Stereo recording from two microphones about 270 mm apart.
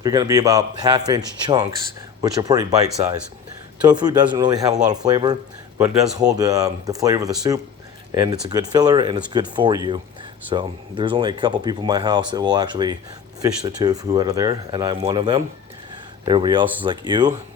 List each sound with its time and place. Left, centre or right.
0.0 s speech: centre